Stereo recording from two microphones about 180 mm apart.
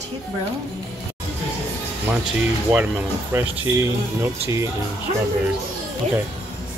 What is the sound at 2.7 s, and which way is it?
Speech, 10° right (ahead or behind).